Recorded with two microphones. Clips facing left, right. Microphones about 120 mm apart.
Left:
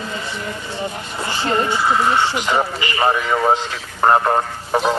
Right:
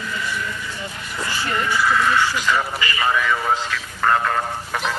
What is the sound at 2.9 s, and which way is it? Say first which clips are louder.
A man's voice: left 4 dB; 30° left (ahead or behind).